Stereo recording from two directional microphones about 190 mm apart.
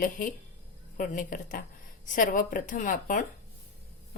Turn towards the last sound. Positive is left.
turn(degrees=45)  # may be behind; listen again after turning